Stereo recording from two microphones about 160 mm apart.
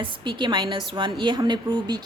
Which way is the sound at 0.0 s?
30° right (ahead or behind).